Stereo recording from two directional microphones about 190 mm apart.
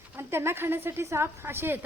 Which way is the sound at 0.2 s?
15° right (ahead or behind).